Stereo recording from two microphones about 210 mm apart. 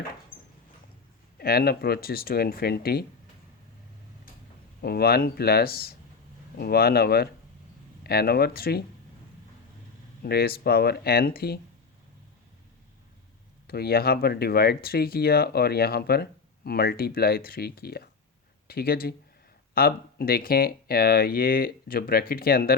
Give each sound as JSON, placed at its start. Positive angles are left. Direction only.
{"t": 1.4, "sound": "speech", "side_deg": 45}
{"t": 4.8, "sound": "speech", "side_deg": 50}
{"t": 10.2, "sound": "speech", "side_deg": 45}
{"t": 13.7, "sound": "speech", "side_deg": 45}